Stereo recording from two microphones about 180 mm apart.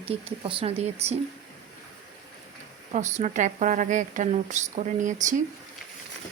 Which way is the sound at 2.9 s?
40° right (ahead or behind).